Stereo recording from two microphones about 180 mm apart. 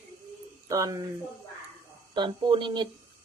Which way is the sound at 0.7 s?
20° right (ahead or behind).